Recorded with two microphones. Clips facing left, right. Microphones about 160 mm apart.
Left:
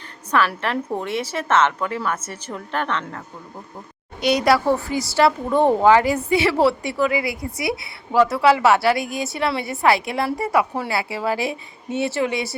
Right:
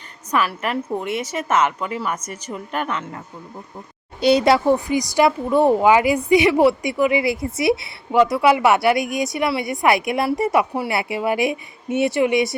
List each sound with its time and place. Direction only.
0.3 s a woman's voice: 5° right (ahead or behind)
4.2 s a woman's voice: 30° right (ahead or behind)